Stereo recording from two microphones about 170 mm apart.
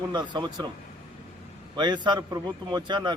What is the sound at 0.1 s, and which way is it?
Speech, 25° right (ahead or behind).